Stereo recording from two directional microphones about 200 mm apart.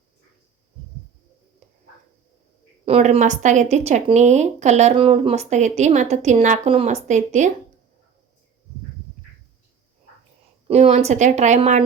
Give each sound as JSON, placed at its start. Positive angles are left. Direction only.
{"t": 2.8, "sound": "speech", "side_deg": -30}
{"t": 10.7, "sound": "speech", "side_deg": -35}